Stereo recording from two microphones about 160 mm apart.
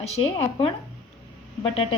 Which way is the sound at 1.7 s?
35° left (ahead or behind).